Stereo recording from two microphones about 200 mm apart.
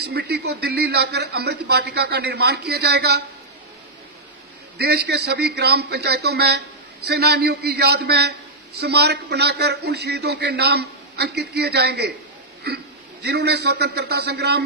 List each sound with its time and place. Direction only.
0.0 s a man's voice: 55° right (ahead or behind)
4.7 s a man's voice: 55° right (ahead or behind)